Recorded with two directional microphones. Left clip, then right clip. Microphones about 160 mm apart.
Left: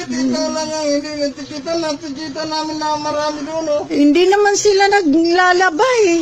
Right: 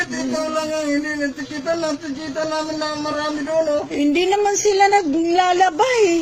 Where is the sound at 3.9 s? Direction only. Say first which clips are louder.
Left 8 dB; 45° left (ahead or behind).